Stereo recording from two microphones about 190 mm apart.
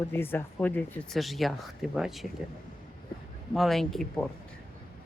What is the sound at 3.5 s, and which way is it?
Speech, centre (ahead or behind).